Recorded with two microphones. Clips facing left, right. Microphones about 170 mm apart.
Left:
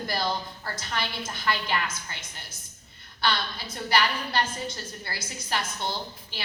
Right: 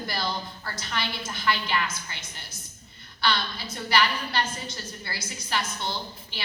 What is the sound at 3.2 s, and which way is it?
A woman's voice, 50° left (ahead or behind).